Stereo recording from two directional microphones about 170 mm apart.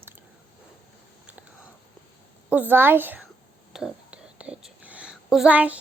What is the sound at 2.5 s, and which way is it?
Speech, 10° right (ahead or behind).